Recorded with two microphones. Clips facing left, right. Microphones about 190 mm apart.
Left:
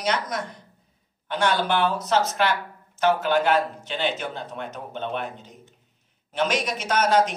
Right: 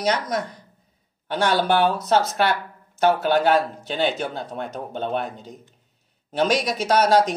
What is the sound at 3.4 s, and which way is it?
Speech, 40° right (ahead or behind).